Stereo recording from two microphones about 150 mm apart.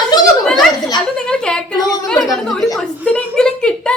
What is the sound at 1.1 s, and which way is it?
A woman's voice, 5° left (ahead or behind).